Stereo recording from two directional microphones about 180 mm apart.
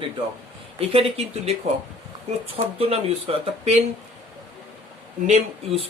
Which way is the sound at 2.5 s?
30° right (ahead or behind).